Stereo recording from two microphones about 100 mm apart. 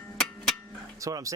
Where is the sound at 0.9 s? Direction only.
35° right (ahead or behind).